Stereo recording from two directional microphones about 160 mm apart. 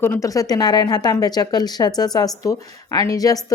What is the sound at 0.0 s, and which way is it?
Speech, 15° left (ahead or behind).